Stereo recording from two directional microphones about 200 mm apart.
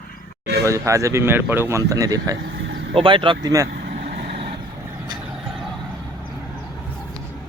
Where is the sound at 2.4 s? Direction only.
60° right (ahead or behind).